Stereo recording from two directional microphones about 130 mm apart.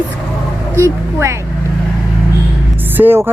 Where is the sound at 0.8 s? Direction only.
20° right (ahead or behind).